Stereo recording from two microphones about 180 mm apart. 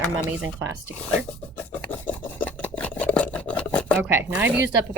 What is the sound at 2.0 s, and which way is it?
Filing, 10° left (ahead or behind).